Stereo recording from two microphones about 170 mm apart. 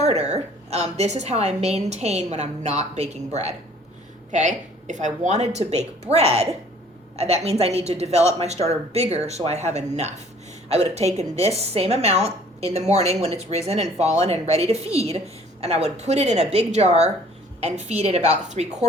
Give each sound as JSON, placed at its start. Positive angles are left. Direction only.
{"t": 0.0, "sound": "a woman's voice", "side_deg": -40}